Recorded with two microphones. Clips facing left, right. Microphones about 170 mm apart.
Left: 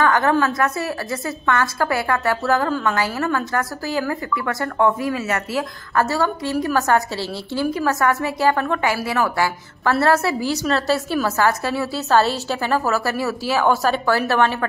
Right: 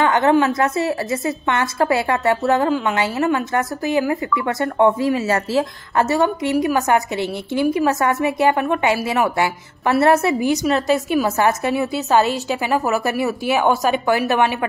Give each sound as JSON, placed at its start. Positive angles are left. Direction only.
{"t": 0.0, "sound": "a woman's voice", "side_deg": -20}